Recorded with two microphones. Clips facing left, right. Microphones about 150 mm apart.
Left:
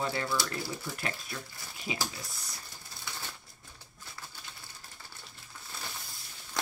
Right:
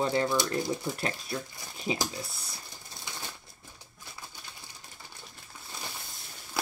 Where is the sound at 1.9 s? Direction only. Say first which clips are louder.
Right 6 dB; 35° right (ahead or behind).